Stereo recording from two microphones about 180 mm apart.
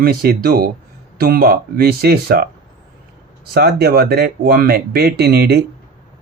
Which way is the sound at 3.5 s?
60° right (ahead or behind).